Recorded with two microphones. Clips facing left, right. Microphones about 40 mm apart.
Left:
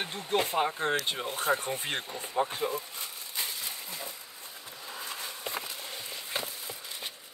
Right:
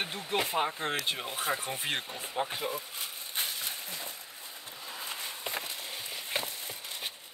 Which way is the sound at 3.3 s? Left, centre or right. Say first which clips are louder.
Right 1 dB; right.